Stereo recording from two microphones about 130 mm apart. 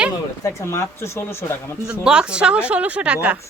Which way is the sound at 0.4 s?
20° left (ahead or behind).